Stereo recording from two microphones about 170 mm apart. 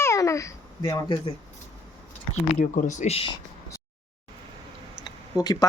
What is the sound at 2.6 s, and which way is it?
Speech, 50° left (ahead or behind).